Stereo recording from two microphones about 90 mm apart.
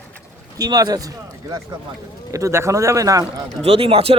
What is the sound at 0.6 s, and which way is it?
Speech, 45° right (ahead or behind).